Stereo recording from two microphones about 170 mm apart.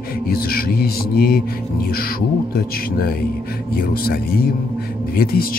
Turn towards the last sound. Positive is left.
turn(degrees=60)  # may be behind; listen again after turning